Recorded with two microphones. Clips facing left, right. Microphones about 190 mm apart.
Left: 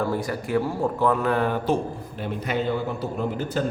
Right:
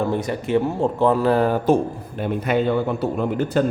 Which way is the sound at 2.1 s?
60° right (ahead or behind).